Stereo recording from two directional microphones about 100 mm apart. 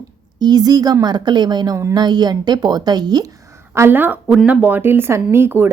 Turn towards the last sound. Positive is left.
turn(degrees=-20)  # may be behind; listen again after turning